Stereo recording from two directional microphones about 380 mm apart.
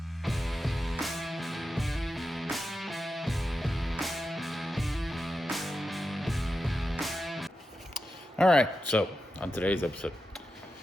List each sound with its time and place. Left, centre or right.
0.2 s music: centre
8.4 s speech: centre